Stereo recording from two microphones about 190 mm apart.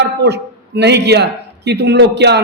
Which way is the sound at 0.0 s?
60° right (ahead or behind).